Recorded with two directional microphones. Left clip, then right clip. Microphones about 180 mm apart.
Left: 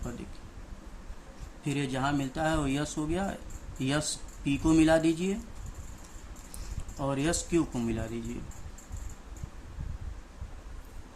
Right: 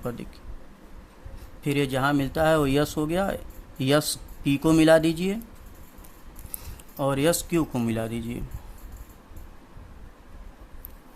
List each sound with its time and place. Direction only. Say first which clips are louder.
1.6 s speech: right 7 dB; 50° right (ahead or behind)
7.0 s speech: right 7 dB; 50° right (ahead or behind)